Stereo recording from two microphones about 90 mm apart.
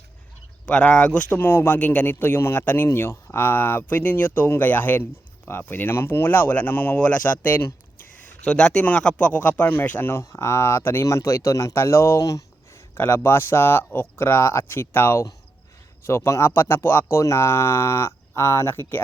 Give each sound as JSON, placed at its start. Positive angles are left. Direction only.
{"t": 0.6, "sound": "speech", "side_deg": 10}